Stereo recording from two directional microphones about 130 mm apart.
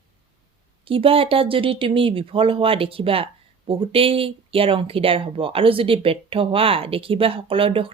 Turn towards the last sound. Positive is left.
turn(degrees=-45)  # may be behind; listen again after turning